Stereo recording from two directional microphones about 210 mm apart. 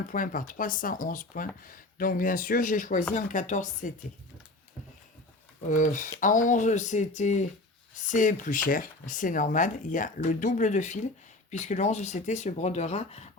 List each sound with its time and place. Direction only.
0.1 s speech: 40° left (ahead or behind)
5.6 s speech: 35° left (ahead or behind)